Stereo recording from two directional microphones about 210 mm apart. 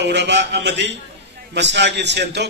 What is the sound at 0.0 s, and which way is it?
A man's voice, 55° right (ahead or behind).